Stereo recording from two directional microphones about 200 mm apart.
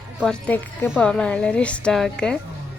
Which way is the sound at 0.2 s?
5° left (ahead or behind).